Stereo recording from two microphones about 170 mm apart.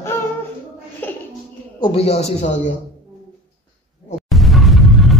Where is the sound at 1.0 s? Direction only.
10° left (ahead or behind).